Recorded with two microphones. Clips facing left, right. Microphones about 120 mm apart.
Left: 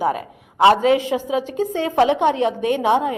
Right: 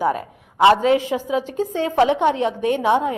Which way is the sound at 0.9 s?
20° left (ahead or behind).